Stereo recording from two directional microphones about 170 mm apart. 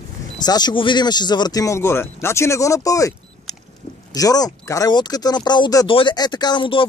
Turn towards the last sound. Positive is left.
turn(degrees=30)  # may be behind; listen again after turning